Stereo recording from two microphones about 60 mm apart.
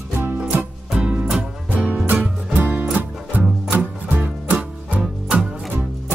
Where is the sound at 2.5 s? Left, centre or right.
Right.